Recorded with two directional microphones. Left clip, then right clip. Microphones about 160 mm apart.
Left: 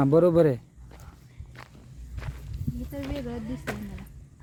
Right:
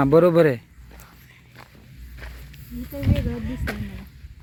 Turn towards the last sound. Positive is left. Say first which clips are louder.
# right 4 dB
turn(degrees=10)  # may be behind; listen again after turning